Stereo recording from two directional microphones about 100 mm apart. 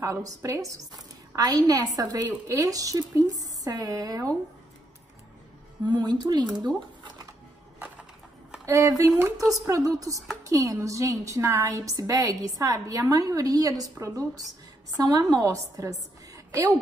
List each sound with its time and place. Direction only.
0.0 s a woman's voice: 30° right (ahead or behind)
5.9 s speech: 45° right (ahead or behind)
8.6 s a woman's voice: 35° right (ahead or behind)